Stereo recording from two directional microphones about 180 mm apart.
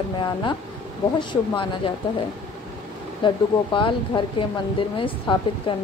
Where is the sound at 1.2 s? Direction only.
25° left (ahead or behind).